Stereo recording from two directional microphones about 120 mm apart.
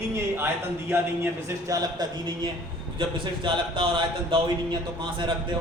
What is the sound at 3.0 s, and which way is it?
Speech, 45° right (ahead or behind).